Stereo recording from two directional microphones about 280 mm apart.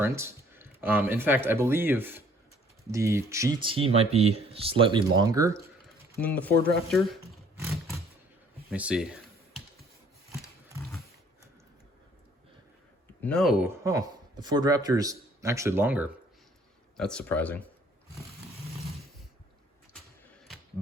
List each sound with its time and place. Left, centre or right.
0.0 s speech: centre
6.1 s speech: centre
6.9 s roar: centre
8.7 s a sound: centre
13.2 s speech: centre